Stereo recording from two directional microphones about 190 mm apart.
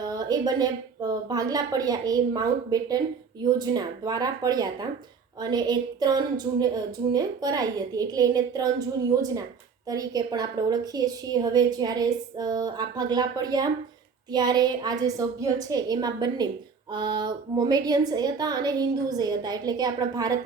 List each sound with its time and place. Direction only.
0.0 s a woman's voice: 20° right (ahead or behind)
9.9 s a woman's voice: 20° right (ahead or behind)